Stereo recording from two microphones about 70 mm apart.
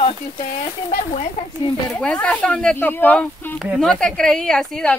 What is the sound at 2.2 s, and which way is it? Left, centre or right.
Speech, centre.